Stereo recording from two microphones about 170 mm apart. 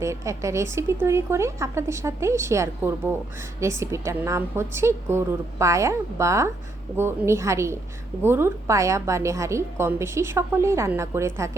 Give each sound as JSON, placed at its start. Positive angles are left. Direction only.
{"t": 0.0, "sound": "a woman's voice", "side_deg": -15}